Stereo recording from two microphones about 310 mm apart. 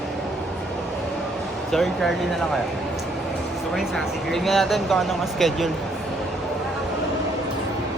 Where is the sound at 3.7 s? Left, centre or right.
Centre.